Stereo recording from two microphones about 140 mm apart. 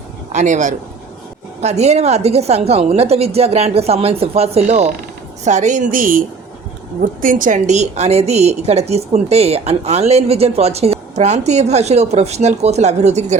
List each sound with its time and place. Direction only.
0.3 s a woman's voice: 60° right (ahead or behind)